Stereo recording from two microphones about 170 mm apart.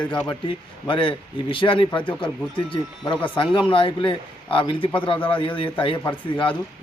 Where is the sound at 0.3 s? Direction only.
30° left (ahead or behind).